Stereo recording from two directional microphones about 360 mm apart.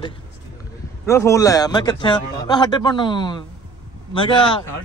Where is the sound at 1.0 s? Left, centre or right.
Centre.